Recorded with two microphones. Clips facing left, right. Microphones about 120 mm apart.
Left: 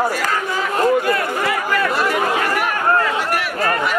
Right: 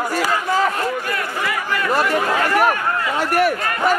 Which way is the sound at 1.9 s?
40° right (ahead or behind).